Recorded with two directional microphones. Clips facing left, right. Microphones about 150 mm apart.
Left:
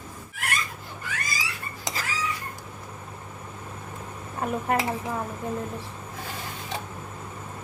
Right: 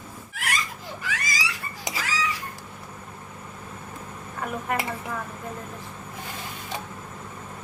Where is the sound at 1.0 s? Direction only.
90° right.